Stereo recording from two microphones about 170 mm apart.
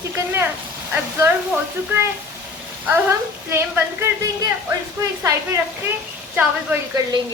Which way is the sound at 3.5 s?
15° right (ahead or behind).